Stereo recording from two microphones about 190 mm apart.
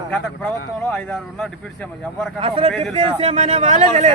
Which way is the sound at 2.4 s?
30° right (ahead or behind).